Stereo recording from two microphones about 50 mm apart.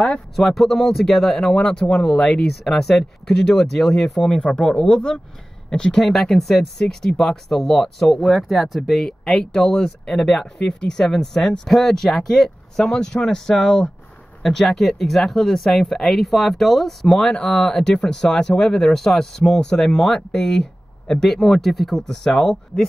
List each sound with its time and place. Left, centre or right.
0.4 s speech: centre
2.6 s speech: centre
12.7 s speech: centre